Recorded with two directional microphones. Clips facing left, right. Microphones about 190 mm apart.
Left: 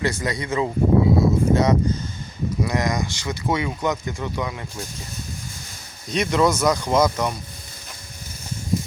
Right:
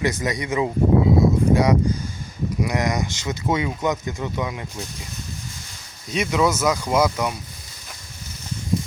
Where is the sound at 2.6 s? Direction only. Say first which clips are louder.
Even; 15° right (ahead or behind).